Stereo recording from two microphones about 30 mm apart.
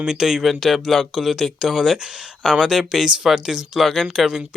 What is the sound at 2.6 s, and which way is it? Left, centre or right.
Speech, centre.